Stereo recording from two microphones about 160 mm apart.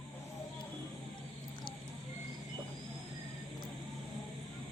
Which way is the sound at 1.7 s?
30° left (ahead or behind).